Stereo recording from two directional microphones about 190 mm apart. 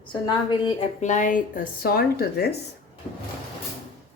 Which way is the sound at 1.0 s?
40° left (ahead or behind).